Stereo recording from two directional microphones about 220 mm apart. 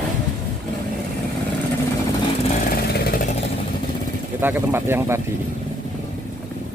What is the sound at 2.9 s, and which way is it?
Vehicle, 45° left (ahead or behind).